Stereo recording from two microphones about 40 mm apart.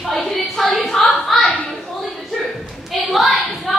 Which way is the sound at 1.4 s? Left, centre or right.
Left.